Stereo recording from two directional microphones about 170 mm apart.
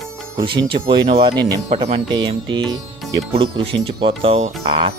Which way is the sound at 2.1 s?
25° right (ahead or behind).